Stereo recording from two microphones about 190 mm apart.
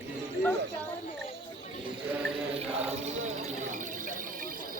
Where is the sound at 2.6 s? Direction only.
35° right (ahead or behind).